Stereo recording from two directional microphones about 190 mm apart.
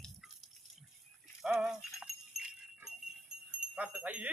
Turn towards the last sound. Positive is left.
turn(degrees=-5)  # may be behind; listen again after turning